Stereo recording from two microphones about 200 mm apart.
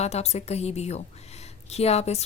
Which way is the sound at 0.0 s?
30° left (ahead or behind).